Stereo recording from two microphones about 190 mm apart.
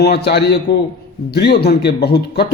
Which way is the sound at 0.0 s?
60° left (ahead or behind).